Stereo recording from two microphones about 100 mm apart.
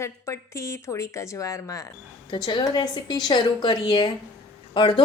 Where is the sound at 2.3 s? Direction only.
55° left (ahead or behind).